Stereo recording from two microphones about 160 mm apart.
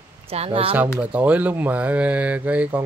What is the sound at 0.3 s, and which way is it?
Speech, 35° right (ahead or behind).